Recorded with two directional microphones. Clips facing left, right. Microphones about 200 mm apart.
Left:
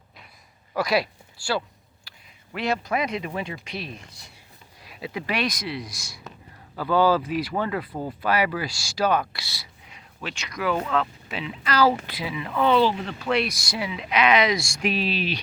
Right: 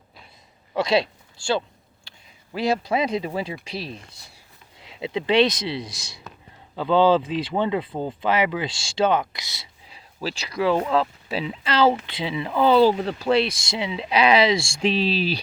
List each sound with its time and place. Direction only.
0.7 s speech: 25° right (ahead or behind)
9.8 s speech: 35° right (ahead or behind)